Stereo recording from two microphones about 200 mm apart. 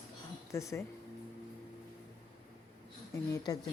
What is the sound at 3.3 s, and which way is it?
Speech, 20° left (ahead or behind).